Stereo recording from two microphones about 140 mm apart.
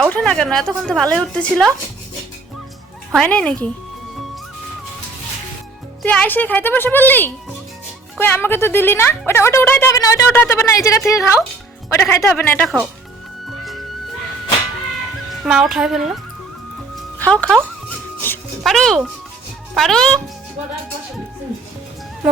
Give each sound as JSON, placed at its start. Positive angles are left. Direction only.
{"t": 0.0, "sound": "a woman's voice", "side_deg": 5}
{"t": 3.2, "sound": "a woman's voice", "side_deg": 10}
{"t": 6.0, "sound": "a woman's voice", "side_deg": 10}
{"t": 15.4, "sound": "a woman's voice", "side_deg": -5}
{"t": 17.2, "sound": "music", "side_deg": 10}
{"t": 18.6, "sound": "a woman's voice", "side_deg": 0}